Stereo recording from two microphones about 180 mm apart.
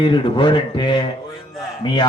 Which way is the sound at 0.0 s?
25° left (ahead or behind).